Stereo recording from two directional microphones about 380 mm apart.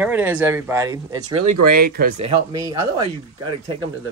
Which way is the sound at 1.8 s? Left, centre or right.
Right.